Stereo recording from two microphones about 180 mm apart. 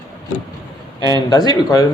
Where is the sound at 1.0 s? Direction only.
20° left (ahead or behind).